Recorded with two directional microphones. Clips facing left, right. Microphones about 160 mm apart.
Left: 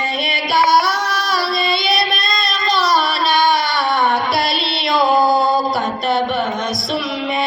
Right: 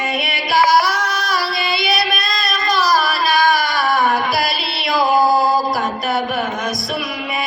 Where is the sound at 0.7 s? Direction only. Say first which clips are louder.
Even; 25° left (ahead or behind).